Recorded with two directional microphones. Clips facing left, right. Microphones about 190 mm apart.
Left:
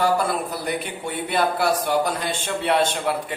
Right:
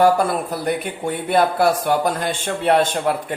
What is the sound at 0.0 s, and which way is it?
Speech, 50° right (ahead or behind).